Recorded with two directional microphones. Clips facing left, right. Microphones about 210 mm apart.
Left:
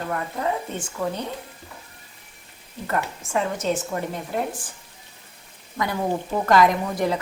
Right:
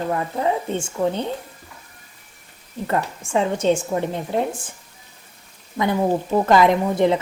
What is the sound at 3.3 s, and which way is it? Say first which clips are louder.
A woman's voice: right 5 dB; 30° right (ahead or behind).